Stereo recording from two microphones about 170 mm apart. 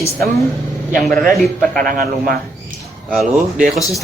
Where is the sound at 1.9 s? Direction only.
55° right (ahead or behind).